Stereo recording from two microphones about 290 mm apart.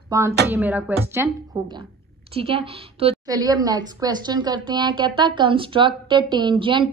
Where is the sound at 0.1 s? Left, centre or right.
Centre.